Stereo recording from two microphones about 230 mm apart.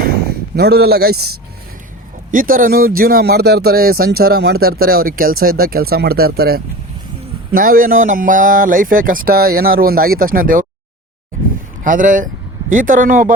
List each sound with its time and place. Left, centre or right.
0.0 s speech: right
11.8 s speech: right